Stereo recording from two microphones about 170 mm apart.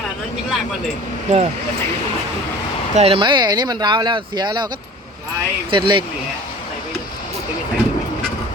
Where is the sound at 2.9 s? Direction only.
35° right (ahead or behind).